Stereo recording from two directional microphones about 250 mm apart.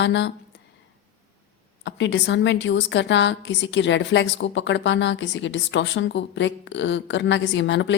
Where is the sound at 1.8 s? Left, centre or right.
Left.